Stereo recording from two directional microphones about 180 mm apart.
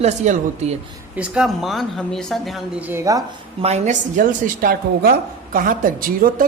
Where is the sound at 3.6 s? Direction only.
40° right (ahead or behind).